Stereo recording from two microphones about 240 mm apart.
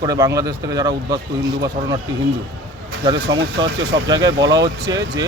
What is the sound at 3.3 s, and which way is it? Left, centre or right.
Speech, right.